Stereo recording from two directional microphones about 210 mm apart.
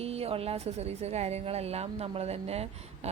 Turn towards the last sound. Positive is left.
turn(degrees=-30)  # may be behind; listen again after turning